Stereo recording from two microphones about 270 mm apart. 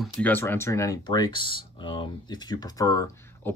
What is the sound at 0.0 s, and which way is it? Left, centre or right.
Speech, centre.